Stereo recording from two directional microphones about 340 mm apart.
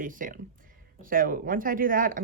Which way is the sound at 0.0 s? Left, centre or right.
Right.